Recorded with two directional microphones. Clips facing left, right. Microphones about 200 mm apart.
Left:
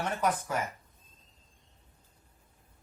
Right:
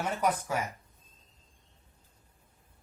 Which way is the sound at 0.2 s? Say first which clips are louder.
Right 1 dB; 10° right (ahead or behind).